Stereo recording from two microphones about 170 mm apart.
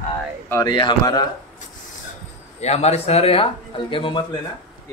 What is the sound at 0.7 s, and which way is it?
Speech, 25° left (ahead or behind).